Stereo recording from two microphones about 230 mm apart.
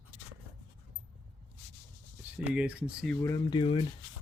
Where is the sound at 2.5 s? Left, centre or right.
Centre.